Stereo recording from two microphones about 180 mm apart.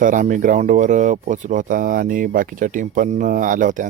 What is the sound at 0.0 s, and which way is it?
Speech, 45° right (ahead or behind).